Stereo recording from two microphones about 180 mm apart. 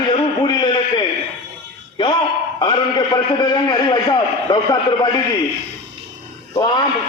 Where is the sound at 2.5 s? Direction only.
25° left (ahead or behind).